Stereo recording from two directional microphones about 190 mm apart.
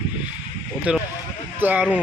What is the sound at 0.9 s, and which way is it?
Speech, 5° right (ahead or behind).